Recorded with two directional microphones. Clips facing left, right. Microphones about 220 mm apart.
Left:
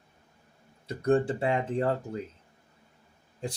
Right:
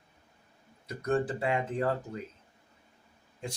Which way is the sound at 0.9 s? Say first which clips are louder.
Left 5 dB; 30° left (ahead or behind).